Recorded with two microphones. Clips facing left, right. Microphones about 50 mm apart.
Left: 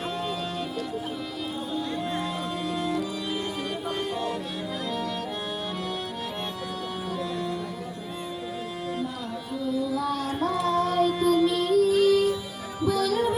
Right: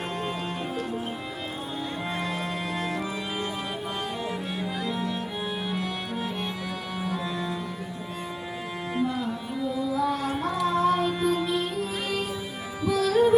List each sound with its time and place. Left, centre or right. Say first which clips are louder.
2.7 s organ: left 3 dB; right
8.9 s music: right 7 dB; right